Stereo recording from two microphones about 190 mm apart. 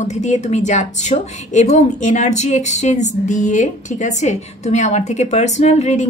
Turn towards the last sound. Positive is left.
turn(degrees=35)  # may be behind; listen again after turning